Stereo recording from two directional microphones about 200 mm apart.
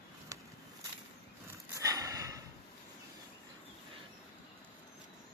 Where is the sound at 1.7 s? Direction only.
15° right (ahead or behind).